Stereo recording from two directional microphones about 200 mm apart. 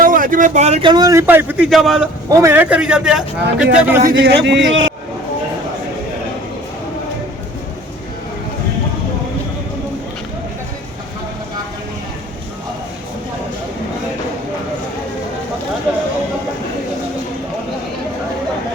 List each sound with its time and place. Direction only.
0.0 s speech: 45° right (ahead or behind); by 2.0 s centre (ahead or behind)
2.3 s a man's voice: 10° right (ahead or behind)
4.0 s speech: 55° right (ahead or behind)